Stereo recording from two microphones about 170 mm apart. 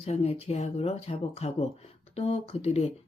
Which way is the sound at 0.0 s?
35° left (ahead or behind).